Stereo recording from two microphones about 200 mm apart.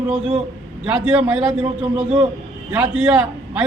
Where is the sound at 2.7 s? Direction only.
10° right (ahead or behind).